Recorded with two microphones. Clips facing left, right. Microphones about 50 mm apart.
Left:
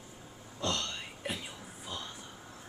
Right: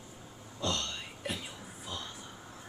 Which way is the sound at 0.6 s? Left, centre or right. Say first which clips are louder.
Even; left.